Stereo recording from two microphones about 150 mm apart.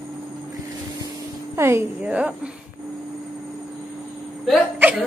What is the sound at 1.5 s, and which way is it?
Speech, 15° right (ahead or behind).